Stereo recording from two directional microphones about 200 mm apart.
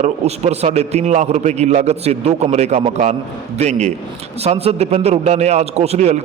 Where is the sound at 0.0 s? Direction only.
35° right (ahead or behind).